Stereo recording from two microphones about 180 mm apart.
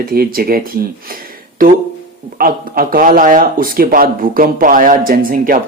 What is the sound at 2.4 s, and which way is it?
A man's voice, 50° right (ahead or behind).